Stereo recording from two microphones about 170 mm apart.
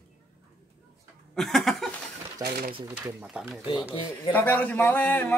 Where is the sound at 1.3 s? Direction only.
Centre (ahead or behind).